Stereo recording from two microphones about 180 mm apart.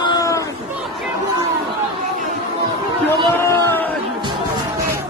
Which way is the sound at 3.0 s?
15° left (ahead or behind).